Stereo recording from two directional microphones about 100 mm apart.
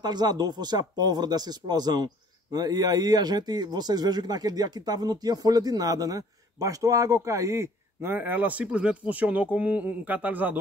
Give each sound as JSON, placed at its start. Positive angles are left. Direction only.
{"t": 0.0, "sound": "speech", "side_deg": -45}